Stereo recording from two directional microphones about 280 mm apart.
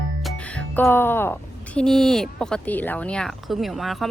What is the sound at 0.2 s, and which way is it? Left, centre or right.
Speech, centre.